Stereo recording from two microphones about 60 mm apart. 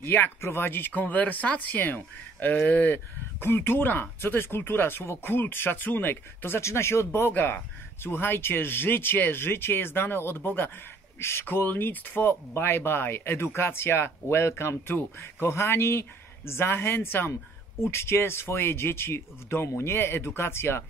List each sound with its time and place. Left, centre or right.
0.0 s speech: left